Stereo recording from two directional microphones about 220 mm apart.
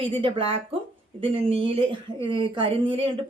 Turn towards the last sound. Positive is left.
turn(degrees=-25)  # may be behind; listen again after turning